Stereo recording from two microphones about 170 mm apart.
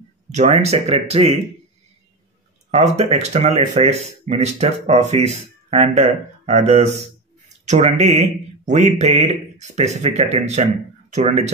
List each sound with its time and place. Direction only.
0.3 s speech: 40° right (ahead or behind)
2.7 s speech: 40° right (ahead or behind)